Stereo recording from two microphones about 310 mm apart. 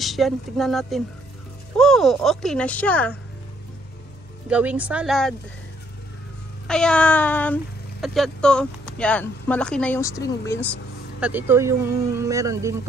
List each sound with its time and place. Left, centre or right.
0.0 s speech: centre
4.5 s speech: centre
6.7 s speech: centre
11.1 s speech: centre